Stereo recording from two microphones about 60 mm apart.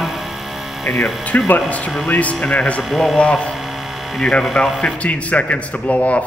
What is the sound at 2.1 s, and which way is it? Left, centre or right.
Speech, left.